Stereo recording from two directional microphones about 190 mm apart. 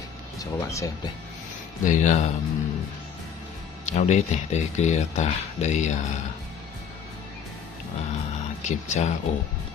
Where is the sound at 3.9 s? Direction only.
35° left (ahead or behind).